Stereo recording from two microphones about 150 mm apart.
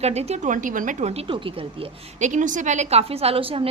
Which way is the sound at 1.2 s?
35° right (ahead or behind).